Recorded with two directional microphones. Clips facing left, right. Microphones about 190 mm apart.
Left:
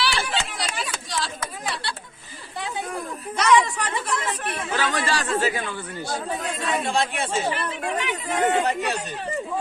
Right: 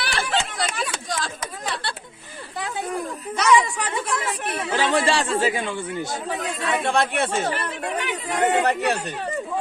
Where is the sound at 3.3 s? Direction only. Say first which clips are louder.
Even; 5° right (ahead or behind).